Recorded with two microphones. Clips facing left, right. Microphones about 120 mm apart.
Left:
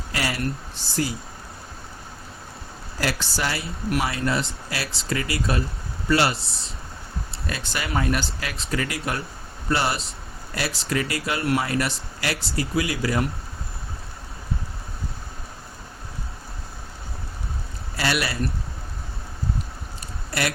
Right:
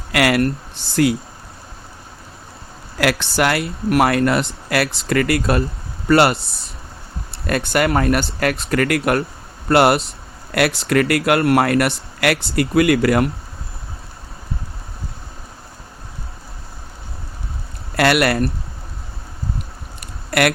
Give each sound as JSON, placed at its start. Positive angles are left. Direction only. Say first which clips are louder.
{"t": 0.1, "sound": "speech", "louder": "right 11 dB", "side_deg": -75}
{"t": 3.0, "sound": "speech", "louder": "right 9 dB", "side_deg": -70}
{"t": 7.4, "sound": "speech", "louder": "right 13 dB", "side_deg": -60}
{"t": 17.9, "sound": "speech", "louder": "right 10 dB", "side_deg": -65}
{"t": 20.0, "sound": "a sound", "louder": "right 9 dB", "side_deg": -70}